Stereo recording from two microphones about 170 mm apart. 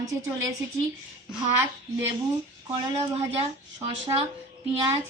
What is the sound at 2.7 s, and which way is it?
A woman's voice, 30° right (ahead or behind).